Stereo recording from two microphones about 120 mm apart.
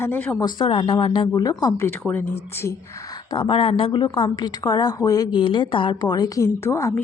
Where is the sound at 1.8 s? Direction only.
20° left (ahead or behind).